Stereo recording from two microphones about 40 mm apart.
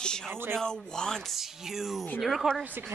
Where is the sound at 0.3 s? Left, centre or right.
Right.